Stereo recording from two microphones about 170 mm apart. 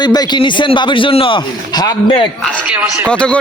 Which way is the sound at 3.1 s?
5° left (ahead or behind).